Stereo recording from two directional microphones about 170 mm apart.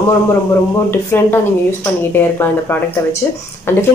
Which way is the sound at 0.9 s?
15° left (ahead or behind).